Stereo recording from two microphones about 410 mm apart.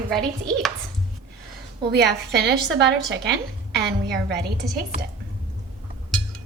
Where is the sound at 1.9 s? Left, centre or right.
Right.